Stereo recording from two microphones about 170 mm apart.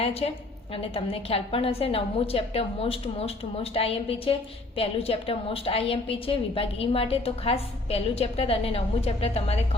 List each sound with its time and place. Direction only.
0.0 s a woman's voice: 35° left (ahead or behind)